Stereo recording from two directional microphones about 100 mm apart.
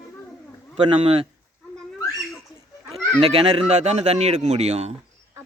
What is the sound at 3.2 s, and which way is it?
Speech, 75° right (ahead or behind).